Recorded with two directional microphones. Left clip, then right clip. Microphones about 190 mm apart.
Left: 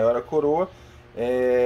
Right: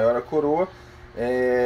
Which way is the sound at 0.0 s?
15° left (ahead or behind).